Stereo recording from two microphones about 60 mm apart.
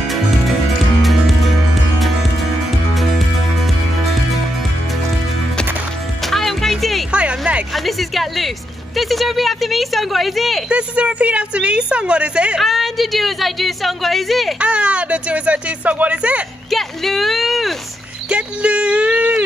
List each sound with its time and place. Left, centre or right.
0.1 s music: centre
2.9 s music: centre
6.2 s music: centre
7.1 s a sound: centre
7.7 s a sound: centre
8.9 s a woman's voice: centre
10.7 s a woman's voice: centre
12.5 s a woman's voice: centre
14.6 s a woman's voice: centre
16.7 s a woman's voice: centre
18.3 s a woman's voice: centre